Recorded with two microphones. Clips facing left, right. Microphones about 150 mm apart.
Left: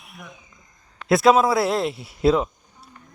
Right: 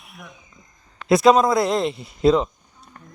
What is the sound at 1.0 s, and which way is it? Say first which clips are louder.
A man's voice: right 1 dB; centre (ahead or behind).